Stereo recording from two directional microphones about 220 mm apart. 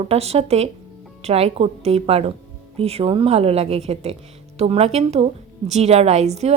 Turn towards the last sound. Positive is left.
turn(degrees=-30)  # may be behind; listen again after turning